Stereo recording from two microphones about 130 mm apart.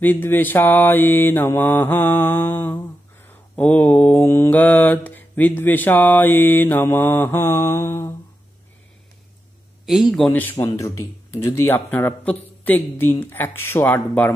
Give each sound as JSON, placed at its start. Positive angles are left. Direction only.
{"t": 0.0, "sound": "speech", "side_deg": 15}
{"t": 9.8, "sound": "a man's voice", "side_deg": -5}
{"t": 10.3, "sound": "speech", "side_deg": 15}